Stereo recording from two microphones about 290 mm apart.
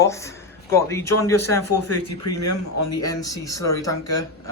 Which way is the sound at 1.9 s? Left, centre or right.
Left.